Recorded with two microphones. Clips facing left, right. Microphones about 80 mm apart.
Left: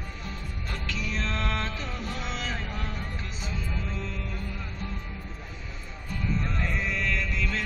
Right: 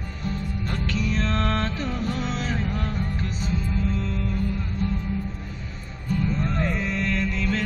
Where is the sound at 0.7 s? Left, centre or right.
Right.